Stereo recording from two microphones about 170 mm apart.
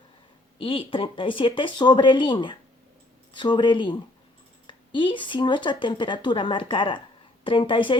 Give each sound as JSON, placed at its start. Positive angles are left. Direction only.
{"t": 0.6, "sound": "speech", "side_deg": 30}